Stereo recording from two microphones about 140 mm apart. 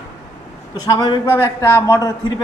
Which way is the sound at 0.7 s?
30° left (ahead or behind).